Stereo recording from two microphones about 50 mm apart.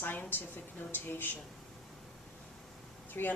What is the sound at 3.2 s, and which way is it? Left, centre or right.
Speech, left.